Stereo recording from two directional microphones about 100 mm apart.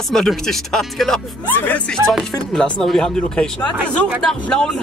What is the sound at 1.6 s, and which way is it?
Speech, 15° left (ahead or behind).